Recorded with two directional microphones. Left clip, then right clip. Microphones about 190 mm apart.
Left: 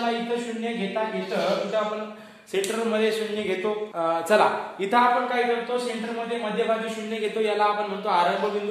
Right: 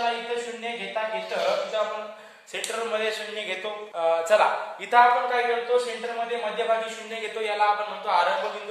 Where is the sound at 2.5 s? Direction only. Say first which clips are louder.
Left 3 dB; 15° left (ahead or behind).